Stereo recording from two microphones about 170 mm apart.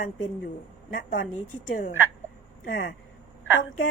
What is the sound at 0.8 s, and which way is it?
Speech, 55° left (ahead or behind).